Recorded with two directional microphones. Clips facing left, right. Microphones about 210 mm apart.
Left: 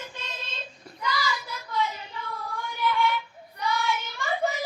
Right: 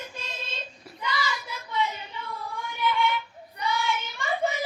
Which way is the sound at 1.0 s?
Centre (ahead or behind).